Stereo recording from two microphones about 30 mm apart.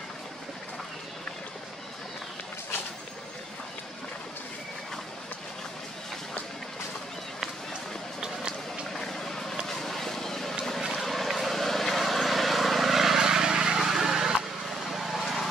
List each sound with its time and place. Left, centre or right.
8.9 s vehicle: centre
13.2 s vehicle: right
13.7 s a sound: centre
14.9 s vehicle: centre